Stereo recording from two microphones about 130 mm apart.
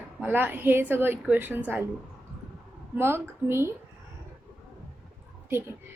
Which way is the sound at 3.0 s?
20° right (ahead or behind).